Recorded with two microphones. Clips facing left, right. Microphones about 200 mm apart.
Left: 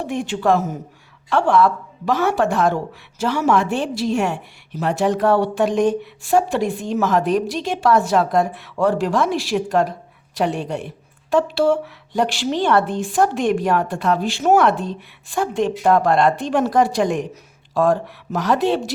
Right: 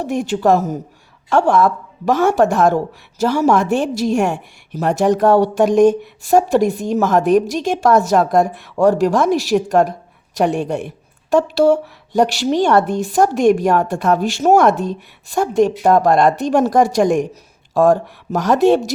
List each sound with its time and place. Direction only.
0.0 s a woman's voice: 40° right (ahead or behind)